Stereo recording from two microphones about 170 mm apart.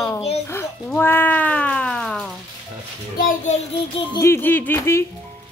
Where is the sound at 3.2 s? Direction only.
55° left (ahead or behind).